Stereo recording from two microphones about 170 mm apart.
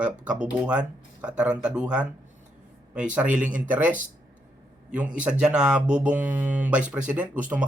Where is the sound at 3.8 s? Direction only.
50° right (ahead or behind).